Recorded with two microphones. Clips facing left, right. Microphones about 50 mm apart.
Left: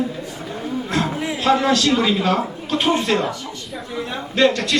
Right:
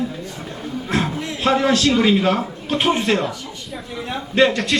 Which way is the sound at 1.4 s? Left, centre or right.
Centre.